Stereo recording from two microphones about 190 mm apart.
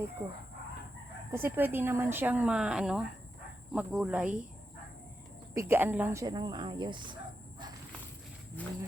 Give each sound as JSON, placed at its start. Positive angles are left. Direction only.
{"t": 1.3, "sound": "speech", "side_deg": -15}
{"t": 5.5, "sound": "speech", "side_deg": -10}